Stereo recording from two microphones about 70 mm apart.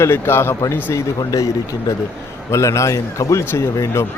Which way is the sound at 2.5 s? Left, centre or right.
Left.